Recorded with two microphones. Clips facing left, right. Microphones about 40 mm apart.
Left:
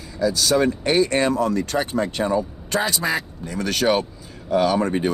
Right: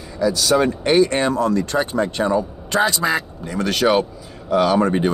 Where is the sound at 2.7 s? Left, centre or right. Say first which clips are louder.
Right 5 dB; right.